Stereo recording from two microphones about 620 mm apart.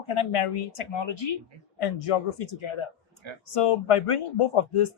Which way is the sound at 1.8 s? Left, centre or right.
Left.